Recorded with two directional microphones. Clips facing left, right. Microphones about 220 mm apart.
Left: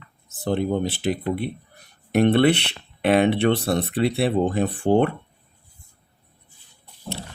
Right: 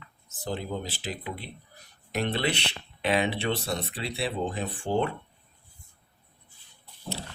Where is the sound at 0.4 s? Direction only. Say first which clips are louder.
Left 10 dB; 60° left (ahead or behind).